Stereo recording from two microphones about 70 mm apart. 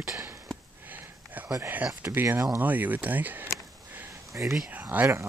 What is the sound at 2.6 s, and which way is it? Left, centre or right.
Speech, right.